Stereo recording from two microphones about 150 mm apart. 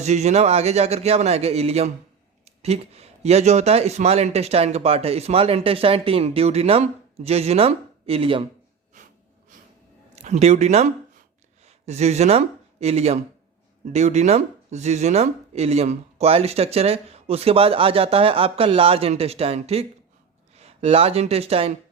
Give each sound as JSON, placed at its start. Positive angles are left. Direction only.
{"t": 0.0, "sound": "speech", "side_deg": -50}
{"t": 8.9, "sound": "snort", "side_deg": -55}
{"t": 10.2, "sound": "speech", "side_deg": -50}